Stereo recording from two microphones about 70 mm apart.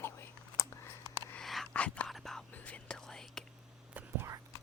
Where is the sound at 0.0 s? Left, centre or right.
Left.